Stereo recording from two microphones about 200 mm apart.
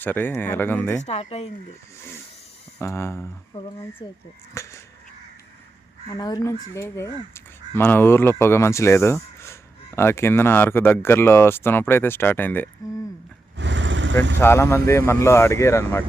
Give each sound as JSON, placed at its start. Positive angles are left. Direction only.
{"t": 0.0, "sound": "speech", "side_deg": 10}
{"t": 1.0, "sound": "speech", "side_deg": 30}
{"t": 2.8, "sound": "speech", "side_deg": 15}
{"t": 4.0, "sound": "speech", "side_deg": 25}
{"t": 6.1, "sound": "speech", "side_deg": 20}
{"t": 13.6, "sound": "vehicle", "side_deg": -65}
{"t": 14.4, "sound": "speech", "side_deg": 15}